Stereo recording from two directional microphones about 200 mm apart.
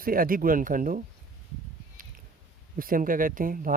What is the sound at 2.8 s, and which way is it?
Speech, 45° right (ahead or behind).